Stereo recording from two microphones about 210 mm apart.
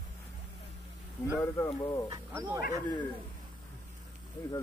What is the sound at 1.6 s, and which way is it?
Speech, 20° left (ahead or behind).